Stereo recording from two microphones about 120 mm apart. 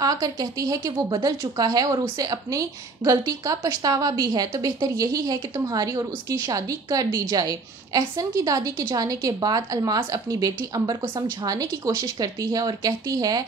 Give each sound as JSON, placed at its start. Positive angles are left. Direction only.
{"t": 0.0, "sound": "a woman's voice", "side_deg": -30}